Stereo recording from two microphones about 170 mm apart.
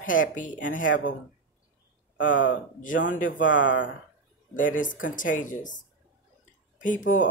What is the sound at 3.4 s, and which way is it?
Speech, 90° left.